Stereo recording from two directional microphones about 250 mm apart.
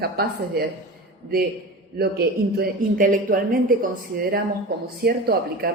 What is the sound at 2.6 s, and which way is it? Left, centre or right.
Speech, right.